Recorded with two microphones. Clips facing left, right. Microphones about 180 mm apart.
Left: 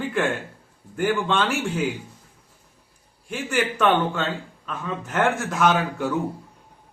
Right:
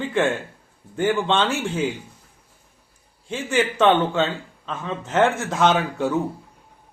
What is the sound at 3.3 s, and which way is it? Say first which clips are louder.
Speech: right 2 dB; 25° right (ahead or behind).